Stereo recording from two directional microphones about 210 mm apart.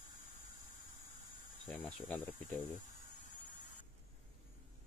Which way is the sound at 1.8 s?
Centre (ahead or behind).